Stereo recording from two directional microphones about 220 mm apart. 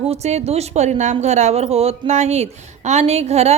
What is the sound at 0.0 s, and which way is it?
A woman's voice, 30° right (ahead or behind).